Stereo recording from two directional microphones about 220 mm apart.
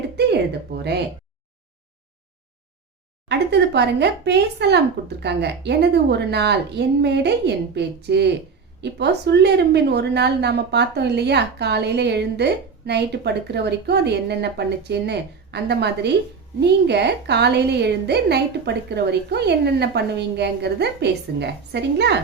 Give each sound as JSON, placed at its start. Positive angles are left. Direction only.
{"t": 3.2, "sound": "a woman's voice", "side_deg": -50}